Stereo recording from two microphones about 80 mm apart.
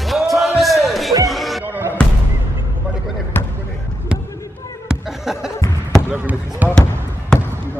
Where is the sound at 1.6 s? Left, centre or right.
Right.